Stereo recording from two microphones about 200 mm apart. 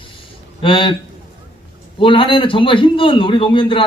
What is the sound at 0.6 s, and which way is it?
Speech, 25° left (ahead or behind).